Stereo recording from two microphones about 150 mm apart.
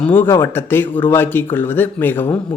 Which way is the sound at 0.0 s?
15° left (ahead or behind).